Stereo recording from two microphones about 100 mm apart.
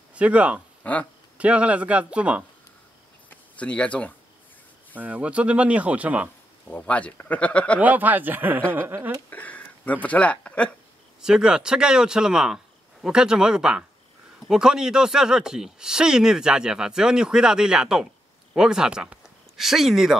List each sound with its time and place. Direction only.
0.1 s speech: 15° right (ahead or behind)
0.8 s speech: 15° left (ahead or behind)
1.4 s speech: 15° right (ahead or behind)
3.3 s a sound: 15° left (ahead or behind)
4.9 s speech: 15° right (ahead or behind)
6.7 s speech: 15° left (ahead or behind)
7.8 s speech: 15° right (ahead or behind)
8.7 s a sound: 20° right (ahead or behind)
9.3 s speech: 15° left (ahead or behind)
11.1 s speech: 5° right (ahead or behind)